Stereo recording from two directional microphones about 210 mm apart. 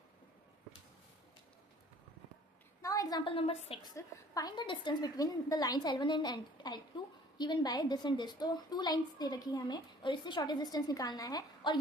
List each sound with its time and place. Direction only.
2.8 s a woman's voice: 15° left (ahead or behind)